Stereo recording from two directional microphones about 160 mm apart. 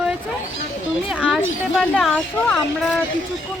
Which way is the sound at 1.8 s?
5° left (ahead or behind).